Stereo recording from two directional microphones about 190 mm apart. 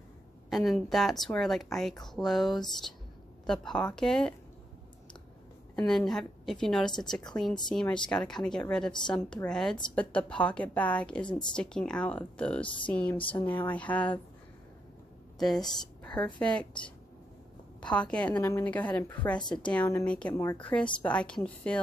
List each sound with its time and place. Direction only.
0.5 s speech: centre (ahead or behind)
5.8 s a woman's voice: 5° left (ahead or behind)
11.2 s speech: 25° left (ahead or behind)
11.5 s a woman's voice: 5° left (ahead or behind)
15.3 s a woman's voice: centre (ahead or behind)